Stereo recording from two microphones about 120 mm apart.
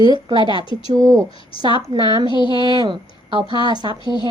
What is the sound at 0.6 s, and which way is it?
Speech, 45° left (ahead or behind).